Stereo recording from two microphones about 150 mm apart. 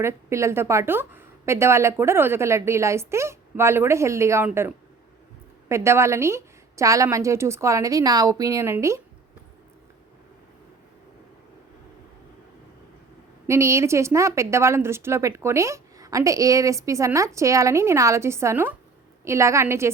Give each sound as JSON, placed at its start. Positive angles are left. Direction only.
{"t": 0.0, "sound": "a woman's voice", "side_deg": -20}
{"t": 13.5, "sound": "a woman's voice", "side_deg": -20}